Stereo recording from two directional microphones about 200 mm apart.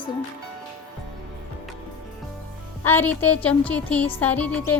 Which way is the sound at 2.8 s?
10° left (ahead or behind).